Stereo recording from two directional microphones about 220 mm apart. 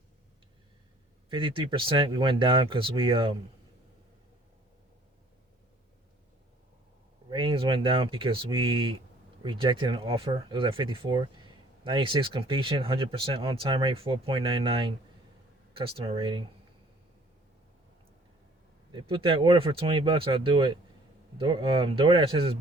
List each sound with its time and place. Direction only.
1.3 s speech: 25° right (ahead or behind)
7.3 s speech: 25° right (ahead or behind)
16.0 s speech: 25° right (ahead or behind)
18.9 s speech: 20° right (ahead or behind)